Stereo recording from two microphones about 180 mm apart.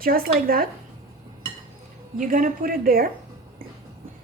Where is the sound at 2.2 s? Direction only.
50° right (ahead or behind).